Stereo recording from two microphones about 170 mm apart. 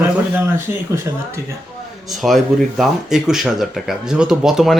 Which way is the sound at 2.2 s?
Centre (ahead or behind).